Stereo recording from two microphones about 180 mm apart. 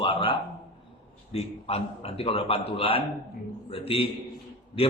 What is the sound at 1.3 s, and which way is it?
A man's voice, 35° left (ahead or behind).